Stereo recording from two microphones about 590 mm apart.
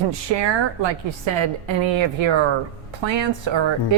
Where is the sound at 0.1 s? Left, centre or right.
Right.